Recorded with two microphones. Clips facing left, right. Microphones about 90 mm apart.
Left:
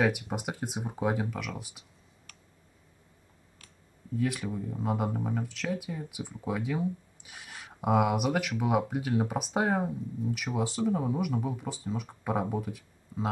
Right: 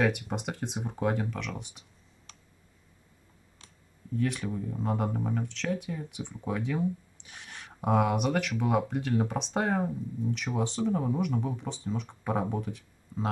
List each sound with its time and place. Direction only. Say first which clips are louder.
0.0 s speech: even; 5° left (ahead or behind)
2.3 s clicking: right 2 dB; 20° right (ahead or behind)
4.2 s speech: even; 5° left (ahead or behind)